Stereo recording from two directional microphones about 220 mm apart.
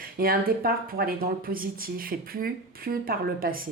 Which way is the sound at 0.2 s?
40° right (ahead or behind).